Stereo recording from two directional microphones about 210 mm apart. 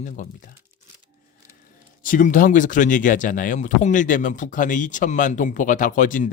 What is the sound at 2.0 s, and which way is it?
Speech, 40° left (ahead or behind).